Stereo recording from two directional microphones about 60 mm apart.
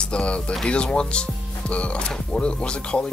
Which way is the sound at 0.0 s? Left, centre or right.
Centre.